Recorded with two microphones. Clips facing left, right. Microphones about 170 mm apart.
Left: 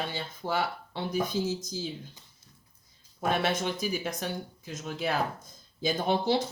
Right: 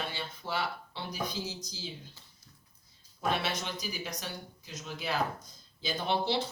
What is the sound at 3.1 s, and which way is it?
Speech, 50° left (ahead or behind).